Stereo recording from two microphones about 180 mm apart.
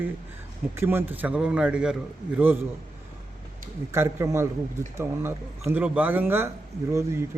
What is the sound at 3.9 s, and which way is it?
Speech, 15° right (ahead or behind).